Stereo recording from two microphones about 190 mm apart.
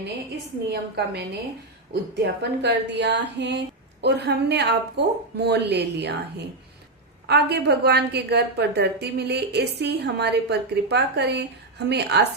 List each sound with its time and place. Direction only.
0.7 s a woman's voice: 60° right (ahead or behind)
7.3 s a woman's voice: 60° right (ahead or behind)